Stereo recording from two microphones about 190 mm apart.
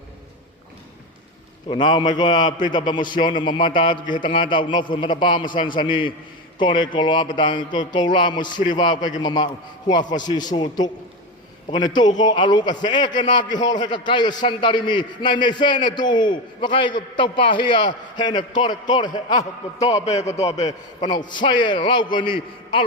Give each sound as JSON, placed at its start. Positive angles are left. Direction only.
{"t": 1.7, "sound": "a man's voice", "side_deg": 25}
{"t": 20.1, "sound": "a man's voice", "side_deg": 35}
{"t": 20.7, "sound": "a man's voice", "side_deg": 20}